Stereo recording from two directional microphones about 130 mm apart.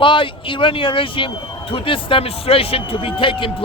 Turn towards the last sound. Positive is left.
turn(degrees=40)  # may be behind; listen again after turning